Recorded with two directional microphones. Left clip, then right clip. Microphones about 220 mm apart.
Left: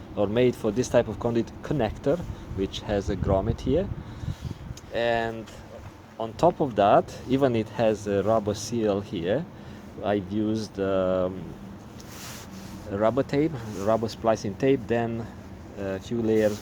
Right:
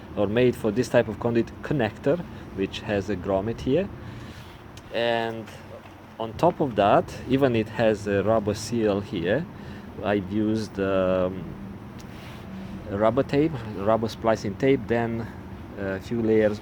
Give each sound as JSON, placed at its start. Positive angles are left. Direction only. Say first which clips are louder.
{"t": 0.2, "sound": "speech", "louder": "right 1 dB", "side_deg": 10}
{"t": 4.9, "sound": "speech", "louder": "right 1 dB", "side_deg": 15}
{"t": 12.9, "sound": "speech", "louder": "right 2 dB", "side_deg": 10}